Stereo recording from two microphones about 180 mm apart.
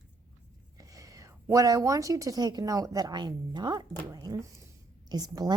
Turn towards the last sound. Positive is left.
turn(degrees=-20)  # may be behind; listen again after turning